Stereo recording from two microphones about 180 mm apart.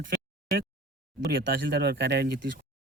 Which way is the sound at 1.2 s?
60° right (ahead or behind).